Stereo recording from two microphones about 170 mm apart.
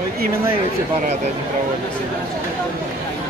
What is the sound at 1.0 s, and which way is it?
Speech, 40° right (ahead or behind).